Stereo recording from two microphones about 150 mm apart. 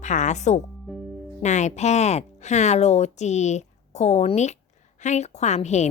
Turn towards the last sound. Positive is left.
turn(degrees=50)  # may be behind; listen again after turning